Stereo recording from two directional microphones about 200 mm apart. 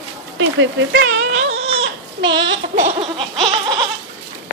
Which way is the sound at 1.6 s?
30° right (ahead or behind).